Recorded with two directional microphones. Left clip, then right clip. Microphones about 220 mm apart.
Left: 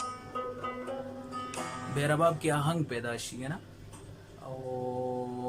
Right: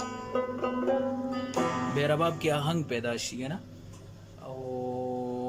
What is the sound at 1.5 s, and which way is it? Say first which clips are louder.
Music: right 9 dB; 35° right (ahead or behind).